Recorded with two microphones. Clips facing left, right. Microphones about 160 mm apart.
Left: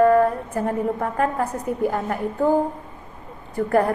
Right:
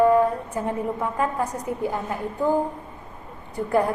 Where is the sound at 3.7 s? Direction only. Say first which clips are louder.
Left 2 dB; 50° left (ahead or behind).